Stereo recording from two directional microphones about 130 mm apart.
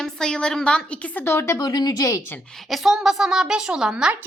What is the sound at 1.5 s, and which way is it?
Speech, 30° left (ahead or behind).